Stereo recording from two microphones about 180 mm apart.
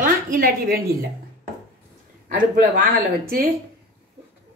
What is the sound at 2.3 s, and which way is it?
A woman's voice, 50° right (ahead or behind).